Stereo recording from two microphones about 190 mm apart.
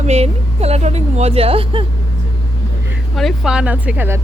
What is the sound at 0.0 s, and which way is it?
Speech, 35° right (ahead or behind).